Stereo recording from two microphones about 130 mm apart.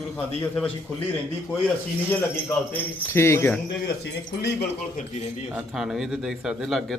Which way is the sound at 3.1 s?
20° left (ahead or behind).